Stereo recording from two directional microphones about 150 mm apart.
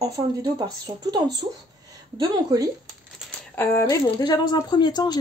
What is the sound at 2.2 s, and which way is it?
Speech, 25° right (ahead or behind).